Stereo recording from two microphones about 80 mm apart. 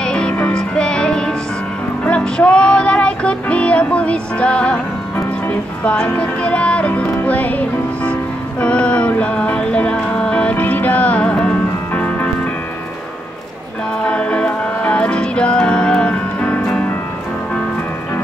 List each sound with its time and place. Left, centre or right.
0.0 s music: centre
14.0 s music: centre